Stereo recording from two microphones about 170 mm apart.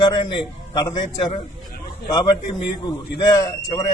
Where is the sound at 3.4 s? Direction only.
25° left (ahead or behind).